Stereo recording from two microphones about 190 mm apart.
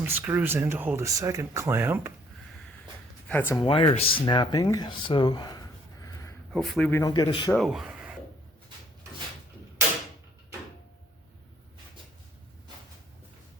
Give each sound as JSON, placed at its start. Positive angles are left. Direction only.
{"t": 0.0, "sound": "speech", "side_deg": -10}
{"t": 3.2, "sound": "a man's voice", "side_deg": 10}
{"t": 3.6, "sound": "speech", "side_deg": 25}
{"t": 6.5, "sound": "a man's voice", "side_deg": 5}
{"t": 7.0, "sound": "speech", "side_deg": 20}
{"t": 7.5, "sound": "speech", "side_deg": 0}